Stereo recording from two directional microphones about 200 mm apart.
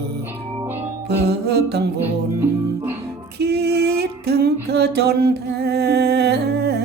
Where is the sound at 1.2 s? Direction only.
55° right (ahead or behind).